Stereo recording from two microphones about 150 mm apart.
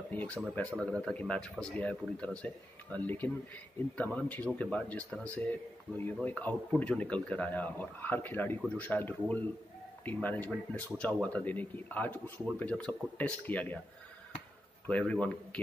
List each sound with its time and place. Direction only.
0.1 s speech: 10° left (ahead or behind)
14.9 s speech: 10° left (ahead or behind)